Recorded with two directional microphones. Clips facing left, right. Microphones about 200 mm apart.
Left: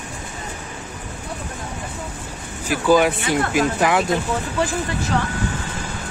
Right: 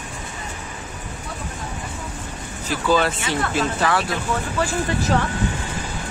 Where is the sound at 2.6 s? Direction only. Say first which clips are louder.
Left 4 dB; 10° left (ahead or behind).